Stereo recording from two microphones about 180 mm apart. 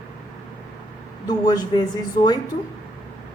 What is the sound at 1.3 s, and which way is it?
Speech, 20° left (ahead or behind).